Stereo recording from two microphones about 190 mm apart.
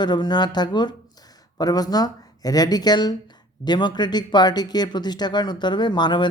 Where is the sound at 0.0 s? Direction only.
25° left (ahead or behind).